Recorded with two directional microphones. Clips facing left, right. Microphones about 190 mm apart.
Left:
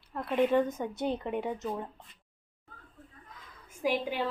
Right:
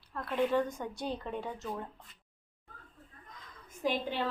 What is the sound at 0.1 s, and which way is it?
A woman's voice, 20° left (ahead or behind).